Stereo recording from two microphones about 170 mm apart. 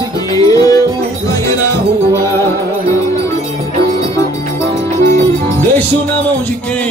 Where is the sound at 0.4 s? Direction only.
20° left (ahead or behind).